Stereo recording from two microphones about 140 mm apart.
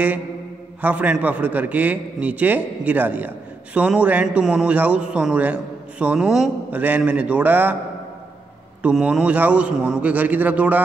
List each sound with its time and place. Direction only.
0.7 s a man's voice: 10° right (ahead or behind)
8.8 s a man's voice: 5° right (ahead or behind)